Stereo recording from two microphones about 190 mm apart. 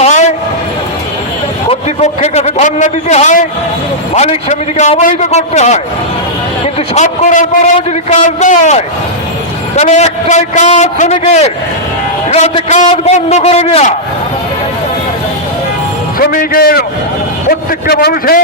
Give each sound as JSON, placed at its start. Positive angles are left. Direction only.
{"t": 0.0, "sound": "train", "side_deg": 40}
{"t": 1.7, "sound": "a man's voice", "side_deg": 35}
{"t": 6.9, "sound": "a man's voice", "side_deg": 35}
{"t": 16.1, "sound": "a man's voice", "side_deg": 50}